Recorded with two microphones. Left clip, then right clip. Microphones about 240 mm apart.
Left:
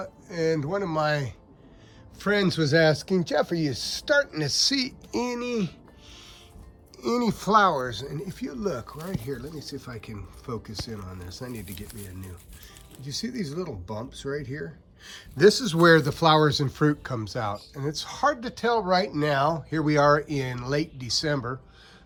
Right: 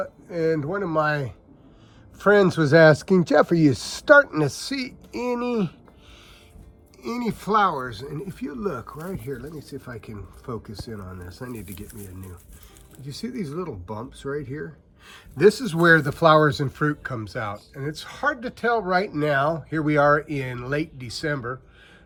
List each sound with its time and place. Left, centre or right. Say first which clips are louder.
0.0 s speech: right 3 dB; centre
4.5 s speech: left 6 dB; centre
7.0 s speech: left 3 dB; centre